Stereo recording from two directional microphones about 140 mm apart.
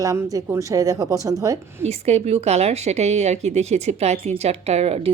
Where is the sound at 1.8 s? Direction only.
50° right (ahead or behind).